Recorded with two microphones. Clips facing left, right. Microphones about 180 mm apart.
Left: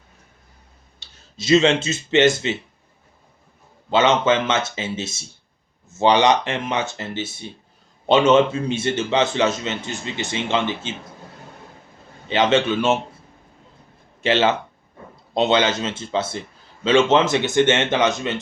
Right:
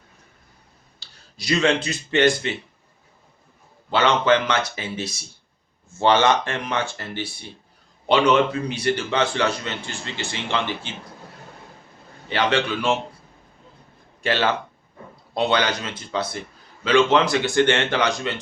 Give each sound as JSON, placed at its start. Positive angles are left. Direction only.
{"t": 0.9, "sound": "speech", "side_deg": 20}
{"t": 3.8, "sound": "a man's voice", "side_deg": 20}
{"t": 12.3, "sound": "a man's voice", "side_deg": 20}
{"t": 14.2, "sound": "a man's voice", "side_deg": 20}